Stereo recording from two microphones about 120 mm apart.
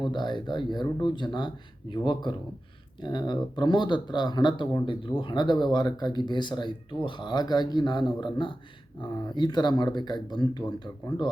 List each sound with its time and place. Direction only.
0.0 s speech: 40° left (ahead or behind)